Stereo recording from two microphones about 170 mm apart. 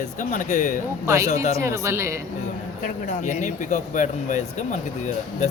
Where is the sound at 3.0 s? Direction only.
45° left (ahead or behind).